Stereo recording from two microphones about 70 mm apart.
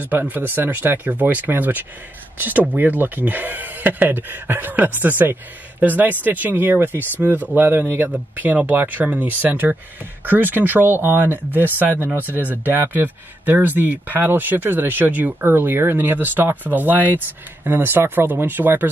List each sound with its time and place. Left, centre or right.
0.0 s speech: right